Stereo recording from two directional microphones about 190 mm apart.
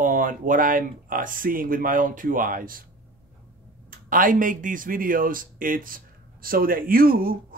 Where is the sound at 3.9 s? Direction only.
45° right (ahead or behind).